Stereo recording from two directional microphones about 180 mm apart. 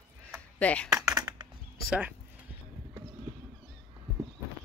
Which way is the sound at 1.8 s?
10° right (ahead or behind).